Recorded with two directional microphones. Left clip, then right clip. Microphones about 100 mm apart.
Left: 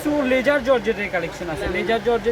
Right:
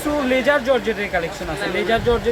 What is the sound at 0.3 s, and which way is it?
Speech, 50° left (ahead or behind).